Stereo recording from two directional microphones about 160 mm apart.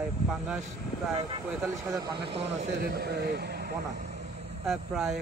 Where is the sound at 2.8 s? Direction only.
75° right (ahead or behind).